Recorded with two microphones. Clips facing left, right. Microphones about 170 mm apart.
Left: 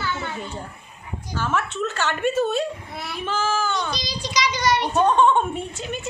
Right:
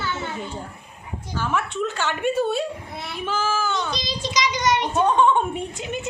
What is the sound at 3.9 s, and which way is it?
Child singing, 25° right (ahead or behind).